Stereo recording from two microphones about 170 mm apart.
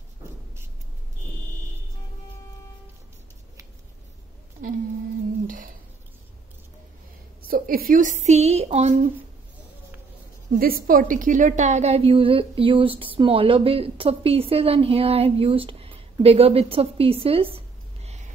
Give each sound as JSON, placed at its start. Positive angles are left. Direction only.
{"t": 4.6, "sound": "a sound", "side_deg": -55}
{"t": 7.4, "sound": "a woman's voice", "side_deg": -60}
{"t": 10.6, "sound": "a woman's voice", "side_deg": -55}